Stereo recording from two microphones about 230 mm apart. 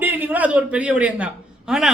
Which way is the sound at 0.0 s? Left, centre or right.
Centre.